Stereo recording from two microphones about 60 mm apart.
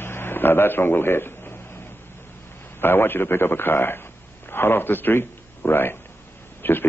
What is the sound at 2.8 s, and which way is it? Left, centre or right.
A man's voice, left.